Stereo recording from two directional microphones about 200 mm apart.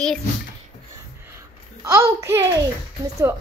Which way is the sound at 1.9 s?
15° right (ahead or behind).